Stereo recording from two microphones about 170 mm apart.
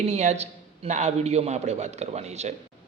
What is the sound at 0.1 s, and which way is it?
A man's voice, 40° right (ahead or behind).